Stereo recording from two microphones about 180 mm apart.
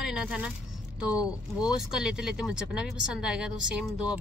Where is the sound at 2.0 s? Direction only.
5° right (ahead or behind).